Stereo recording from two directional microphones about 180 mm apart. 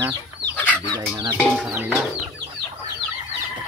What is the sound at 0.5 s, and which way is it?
Chicken, 10° left (ahead or behind).